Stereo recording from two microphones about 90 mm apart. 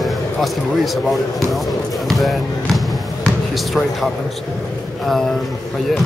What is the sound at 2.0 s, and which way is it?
Speech, centre (ahead or behind).